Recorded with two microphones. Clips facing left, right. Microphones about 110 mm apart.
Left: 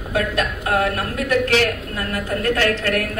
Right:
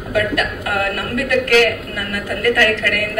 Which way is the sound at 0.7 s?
25° left (ahead or behind).